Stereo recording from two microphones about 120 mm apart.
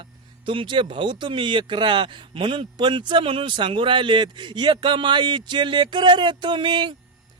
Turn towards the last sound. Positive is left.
turn(degrees=-40)  # may be behind; listen again after turning